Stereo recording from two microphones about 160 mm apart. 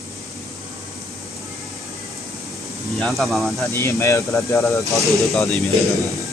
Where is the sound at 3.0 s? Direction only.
Centre (ahead or behind).